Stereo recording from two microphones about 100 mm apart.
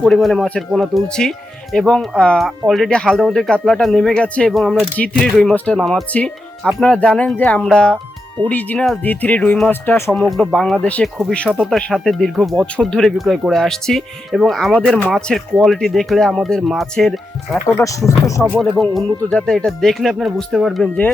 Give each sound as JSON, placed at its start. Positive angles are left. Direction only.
{"t": 0.0, "sound": "speech", "side_deg": 0}
{"t": 5.8, "sound": "speech", "side_deg": 0}
{"t": 10.1, "sound": "speech", "side_deg": 0}
{"t": 11.0, "sound": "speech", "side_deg": 0}
{"t": 11.4, "sound": "speech", "side_deg": -15}
{"t": 11.7, "sound": "speech", "side_deg": 5}
{"t": 17.7, "sound": "speech", "side_deg": 30}
{"t": 18.6, "sound": "speech", "side_deg": 5}